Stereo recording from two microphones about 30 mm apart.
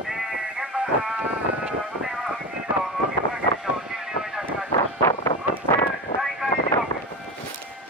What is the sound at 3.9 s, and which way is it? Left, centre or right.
Vehicle, centre.